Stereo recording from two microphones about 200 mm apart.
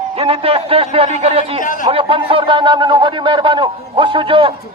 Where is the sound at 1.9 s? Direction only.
25° right (ahead or behind).